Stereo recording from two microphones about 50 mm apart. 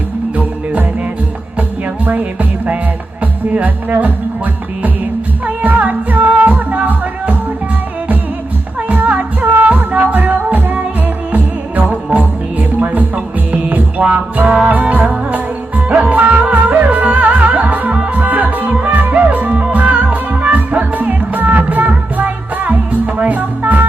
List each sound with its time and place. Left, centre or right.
0.3 s music: right
2.0 s music: right
5.6 s music: right
8.9 s music: right